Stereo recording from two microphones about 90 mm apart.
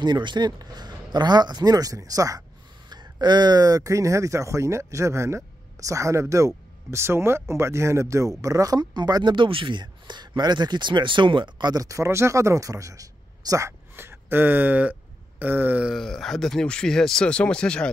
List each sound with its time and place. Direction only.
0.0 s speech: 55° right (ahead or behind); by 2.4 s 40° right (ahead or behind)
2.9 s speech: 55° right (ahead or behind); by 15.9 s 20° right (ahead or behind)
15.9 s speech: 5° left (ahead or behind)